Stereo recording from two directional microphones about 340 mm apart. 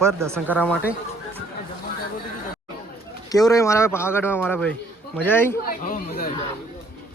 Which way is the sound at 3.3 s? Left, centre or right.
Centre.